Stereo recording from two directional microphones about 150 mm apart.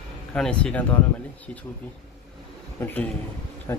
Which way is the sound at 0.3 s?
5° left (ahead or behind).